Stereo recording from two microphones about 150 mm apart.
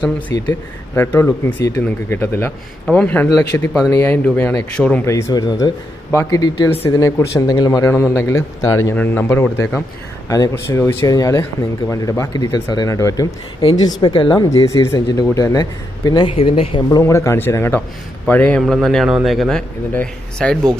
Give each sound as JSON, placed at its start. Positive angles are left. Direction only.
{"t": 0.0, "sound": "speech", "side_deg": 30}
{"t": 0.9, "sound": "a man's voice", "side_deg": 15}
{"t": 5.0, "sound": "a man's voice", "side_deg": 25}
{"t": 14.0, "sound": "speech", "side_deg": 35}
{"t": 14.5, "sound": "a man's voice", "side_deg": 20}
{"t": 17.0, "sound": "a man's voice", "side_deg": 20}